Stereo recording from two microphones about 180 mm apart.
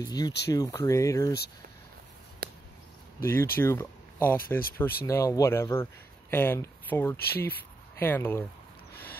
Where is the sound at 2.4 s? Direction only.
55° right (ahead or behind).